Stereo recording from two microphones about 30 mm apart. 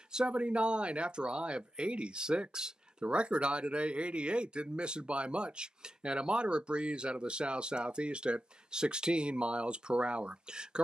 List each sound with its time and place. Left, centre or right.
0.3 s speech: right
3.1 s speech: right
10.5 s speech: right